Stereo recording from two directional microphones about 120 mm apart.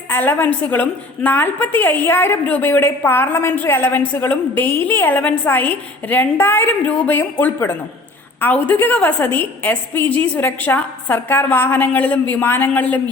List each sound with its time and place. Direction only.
0.1 s a woman's voice: 15° left (ahead or behind)